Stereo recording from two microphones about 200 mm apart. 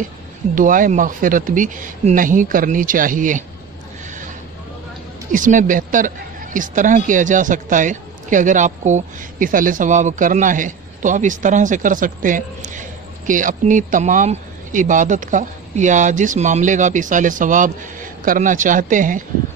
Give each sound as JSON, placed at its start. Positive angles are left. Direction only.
{"t": 0.6, "sound": "a man's voice", "side_deg": -40}
{"t": 5.3, "sound": "a man's voice", "side_deg": -40}